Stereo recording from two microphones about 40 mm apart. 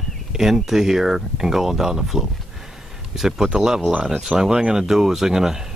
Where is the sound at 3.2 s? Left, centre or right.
Centre.